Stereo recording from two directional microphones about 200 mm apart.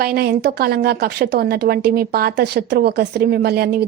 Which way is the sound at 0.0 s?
50° right (ahead or behind).